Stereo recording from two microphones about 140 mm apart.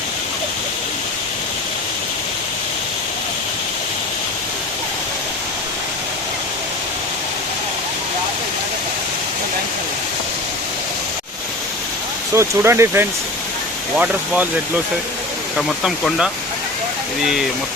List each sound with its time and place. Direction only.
12.3 s speech: 20° right (ahead or behind)
15.5 s speech: 5° right (ahead or behind)